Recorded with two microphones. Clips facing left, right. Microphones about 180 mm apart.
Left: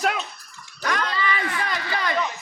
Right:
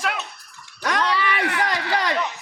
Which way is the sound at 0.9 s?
70° right (ahead or behind).